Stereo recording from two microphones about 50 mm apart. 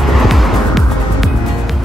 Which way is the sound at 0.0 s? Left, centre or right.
Centre.